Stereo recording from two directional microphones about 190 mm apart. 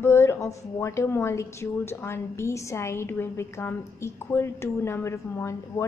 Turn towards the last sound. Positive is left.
turn(degrees=15)  # may be behind; listen again after turning